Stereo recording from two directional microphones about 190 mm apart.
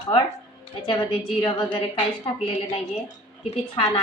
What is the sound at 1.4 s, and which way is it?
Speech, 25° left (ahead or behind).